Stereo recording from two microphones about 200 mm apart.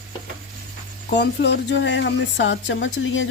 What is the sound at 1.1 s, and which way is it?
Speech, 60° left (ahead or behind).